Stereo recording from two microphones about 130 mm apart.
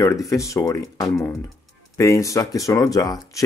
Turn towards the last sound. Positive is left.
turn(degrees=30)  # may be behind; listen again after turning